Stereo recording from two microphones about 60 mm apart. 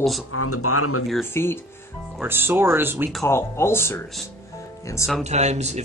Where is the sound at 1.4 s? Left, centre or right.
Left.